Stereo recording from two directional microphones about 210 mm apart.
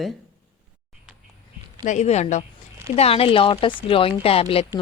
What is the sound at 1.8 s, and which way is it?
A woman's voice, 35° left (ahead or behind).